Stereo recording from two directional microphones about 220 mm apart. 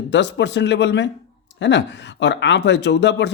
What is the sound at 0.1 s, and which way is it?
Speech, 50° left (ahead or behind).